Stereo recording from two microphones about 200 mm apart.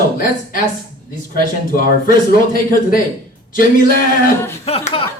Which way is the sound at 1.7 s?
45° left (ahead or behind).